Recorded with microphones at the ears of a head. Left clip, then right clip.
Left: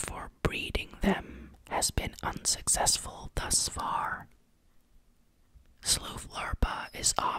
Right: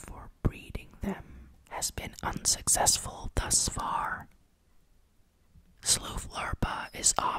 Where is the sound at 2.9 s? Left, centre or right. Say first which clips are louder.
Right 1 dB; centre.